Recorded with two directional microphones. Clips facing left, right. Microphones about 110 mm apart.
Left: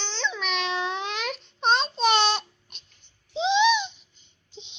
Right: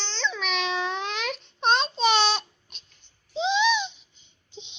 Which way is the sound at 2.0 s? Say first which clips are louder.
Left 1 dB; 50° left (ahead or behind).